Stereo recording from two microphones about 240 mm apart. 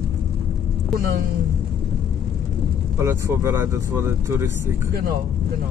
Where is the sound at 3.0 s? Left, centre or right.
Centre.